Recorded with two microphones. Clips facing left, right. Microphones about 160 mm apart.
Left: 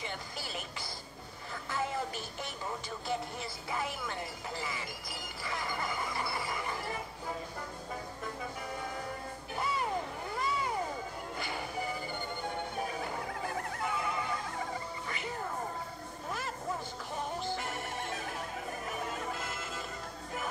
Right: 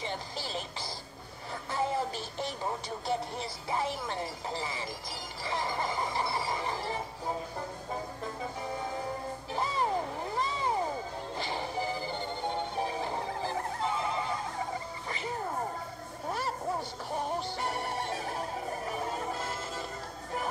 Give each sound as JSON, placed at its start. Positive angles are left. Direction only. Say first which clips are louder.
{"t": 0.0, "sound": "music", "louder": "right 4 dB", "side_deg": -30}
{"t": 9.5, "sound": "music", "louder": "right 3 dB", "side_deg": -30}
{"t": 10.3, "sound": "vehicle", "louder": "right 1 dB", "side_deg": -30}
{"t": 11.3, "sound": "music", "louder": "right 4 dB", "side_deg": -30}
{"t": 16.3, "sound": "a sound", "louder": "right 5 dB", "side_deg": -35}